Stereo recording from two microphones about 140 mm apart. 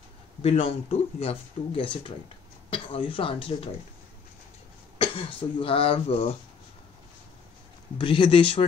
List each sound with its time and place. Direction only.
0.4 s speech: 45° left (ahead or behind)
4.9 s speech: 40° left (ahead or behind)
8.0 s speech: 40° left (ahead or behind)